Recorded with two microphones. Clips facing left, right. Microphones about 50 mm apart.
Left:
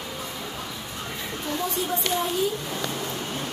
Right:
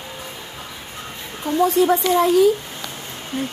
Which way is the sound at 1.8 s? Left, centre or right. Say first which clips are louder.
Right 10 dB; right.